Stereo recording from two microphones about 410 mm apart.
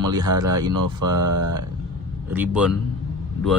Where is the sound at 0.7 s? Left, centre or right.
Right.